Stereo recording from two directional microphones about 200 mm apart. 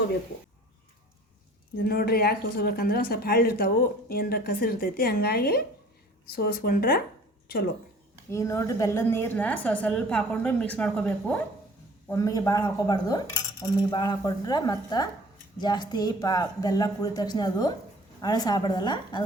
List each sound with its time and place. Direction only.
1.8 s a woman's voice: 50° left (ahead or behind)
8.3 s a woman's voice: 15° left (ahead or behind)
12.0 s speech: 15° left (ahead or behind)